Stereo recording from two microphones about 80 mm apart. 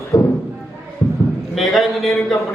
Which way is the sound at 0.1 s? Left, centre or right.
Left.